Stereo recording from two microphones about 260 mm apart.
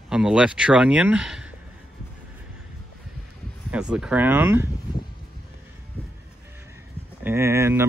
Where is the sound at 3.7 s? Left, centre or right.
Centre.